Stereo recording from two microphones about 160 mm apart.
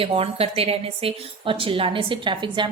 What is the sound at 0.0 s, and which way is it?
A woman's voice, 35° right (ahead or behind).